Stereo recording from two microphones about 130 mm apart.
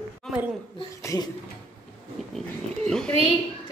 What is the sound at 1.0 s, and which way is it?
Speech, 25° left (ahead or behind).